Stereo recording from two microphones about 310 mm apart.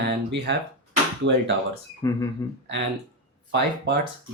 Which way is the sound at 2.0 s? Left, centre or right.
Centre.